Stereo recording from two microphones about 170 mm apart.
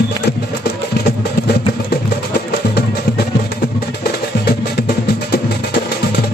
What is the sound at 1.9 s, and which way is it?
Music, 70° left (ahead or behind).